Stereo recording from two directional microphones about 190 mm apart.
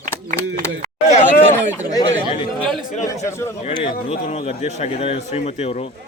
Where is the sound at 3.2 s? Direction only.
15° left (ahead or behind).